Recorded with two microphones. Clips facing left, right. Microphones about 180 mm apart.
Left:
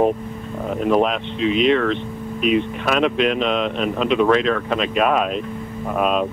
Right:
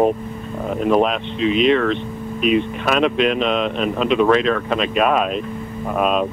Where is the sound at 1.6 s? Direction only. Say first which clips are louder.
Right 1 dB; 15° right (ahead or behind).